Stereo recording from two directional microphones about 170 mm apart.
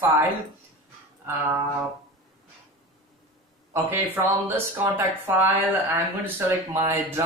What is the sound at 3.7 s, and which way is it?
Speech, 10° right (ahead or behind).